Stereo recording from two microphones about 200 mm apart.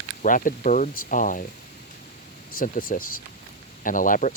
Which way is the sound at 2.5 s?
45° left (ahead or behind).